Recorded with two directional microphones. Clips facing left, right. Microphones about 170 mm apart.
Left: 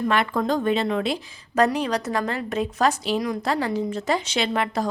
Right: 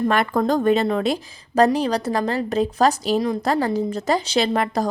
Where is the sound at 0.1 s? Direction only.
45° right (ahead or behind).